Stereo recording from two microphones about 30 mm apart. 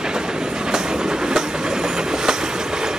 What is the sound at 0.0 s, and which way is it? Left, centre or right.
Train, right.